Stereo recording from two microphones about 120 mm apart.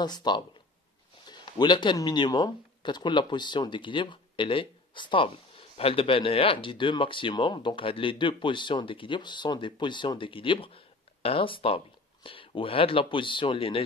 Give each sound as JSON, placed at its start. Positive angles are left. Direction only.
{"t": 0.0, "sound": "speech", "side_deg": 35}
{"t": 1.2, "sound": "a sound", "side_deg": 40}
{"t": 2.0, "sound": "speech", "side_deg": 40}